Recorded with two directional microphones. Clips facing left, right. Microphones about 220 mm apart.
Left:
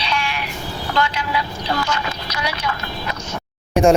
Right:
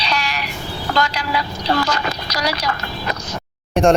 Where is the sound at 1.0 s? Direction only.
40° right (ahead or behind).